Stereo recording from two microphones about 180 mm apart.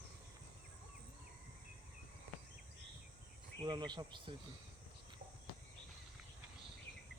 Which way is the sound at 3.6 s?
25° right (ahead or behind).